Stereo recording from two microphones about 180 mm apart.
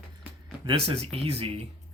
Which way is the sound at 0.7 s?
30° right (ahead or behind).